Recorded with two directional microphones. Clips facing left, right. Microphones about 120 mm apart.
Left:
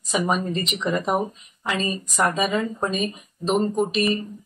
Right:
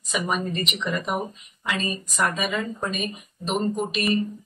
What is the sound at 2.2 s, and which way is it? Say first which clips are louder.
Speech: left 4 dB; 30° left (ahead or behind).